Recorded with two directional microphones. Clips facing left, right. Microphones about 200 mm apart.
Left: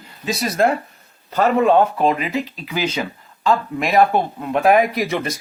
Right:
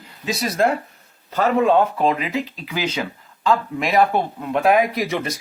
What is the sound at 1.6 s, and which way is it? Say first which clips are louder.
Speech: left 2 dB; 45° left (ahead or behind).